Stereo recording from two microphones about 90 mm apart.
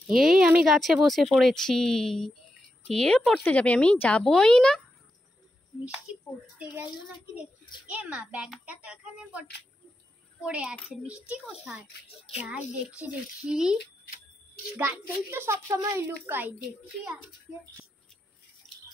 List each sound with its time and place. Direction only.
0.0 s speech: 5° right (ahead or behind)
6.1 s a child's voice: 15° right (ahead or behind)
10.4 s a child's voice: 10° right (ahead or behind)
14.8 s a woman's voice: 30° right (ahead or behind)
16.3 s a woman's voice: 20° right (ahead or behind)
18.6 s a sound: 5° left (ahead or behind)